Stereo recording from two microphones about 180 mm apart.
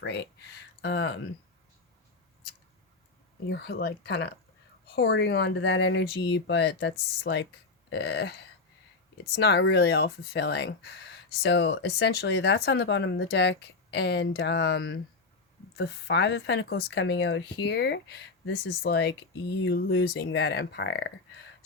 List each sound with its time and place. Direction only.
0.0 s speech: 70° left (ahead or behind)
3.5 s speech: 65° left (ahead or behind)